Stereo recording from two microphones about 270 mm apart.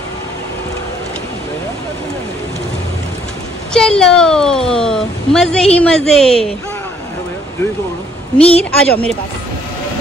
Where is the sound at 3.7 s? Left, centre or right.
Centre.